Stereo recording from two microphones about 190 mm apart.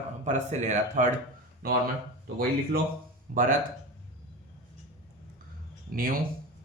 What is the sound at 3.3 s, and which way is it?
Speech, 45° right (ahead or behind).